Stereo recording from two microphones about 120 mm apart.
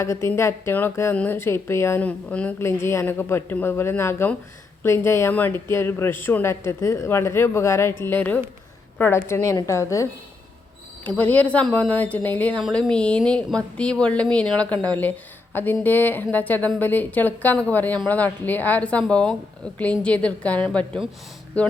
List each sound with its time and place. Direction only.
0.0 s speech: 25° left (ahead or behind)
2.0 s a woman's voice: 10° left (ahead or behind)
11.2 s a woman's voice: 10° left (ahead or behind)